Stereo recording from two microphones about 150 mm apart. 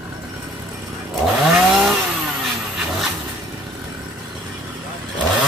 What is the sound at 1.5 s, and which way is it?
Chainsaw, 5° right (ahead or behind).